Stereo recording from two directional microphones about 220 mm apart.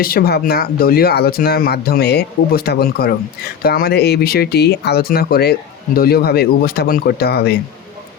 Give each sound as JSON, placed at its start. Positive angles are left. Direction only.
{"t": 0.0, "sound": "speech", "side_deg": 45}